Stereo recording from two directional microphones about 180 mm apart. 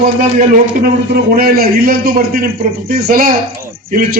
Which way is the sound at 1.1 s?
60° right (ahead or behind).